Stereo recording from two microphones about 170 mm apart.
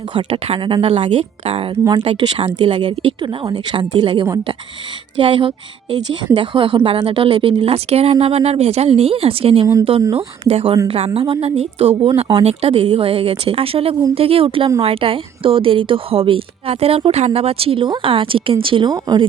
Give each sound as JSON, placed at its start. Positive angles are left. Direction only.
{"t": 0.1, "sound": "a woman's voice", "side_deg": -30}